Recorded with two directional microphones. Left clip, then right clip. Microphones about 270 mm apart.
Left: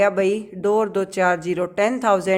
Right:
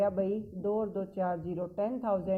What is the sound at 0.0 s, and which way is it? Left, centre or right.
Speech, left.